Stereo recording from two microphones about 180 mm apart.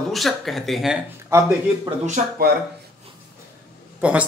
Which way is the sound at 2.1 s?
55° right (ahead or behind).